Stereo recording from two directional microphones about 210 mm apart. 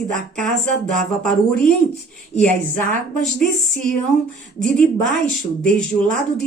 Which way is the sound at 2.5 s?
40° right (ahead or behind).